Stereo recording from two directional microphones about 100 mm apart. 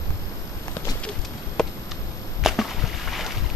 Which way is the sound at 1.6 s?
5° left (ahead or behind).